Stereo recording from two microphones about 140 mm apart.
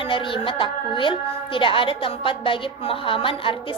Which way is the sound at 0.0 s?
40° left (ahead or behind).